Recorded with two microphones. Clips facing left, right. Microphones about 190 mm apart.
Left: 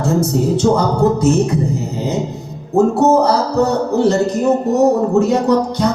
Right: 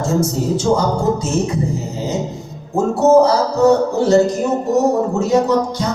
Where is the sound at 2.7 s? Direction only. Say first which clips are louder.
Even; 60° left (ahead or behind).